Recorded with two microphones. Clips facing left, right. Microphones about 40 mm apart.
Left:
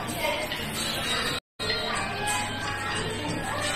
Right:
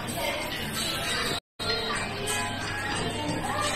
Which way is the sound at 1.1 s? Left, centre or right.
Centre.